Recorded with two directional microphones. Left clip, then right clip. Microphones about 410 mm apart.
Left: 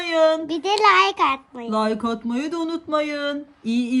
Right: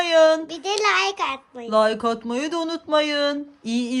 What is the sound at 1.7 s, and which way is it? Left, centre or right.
Speech, centre.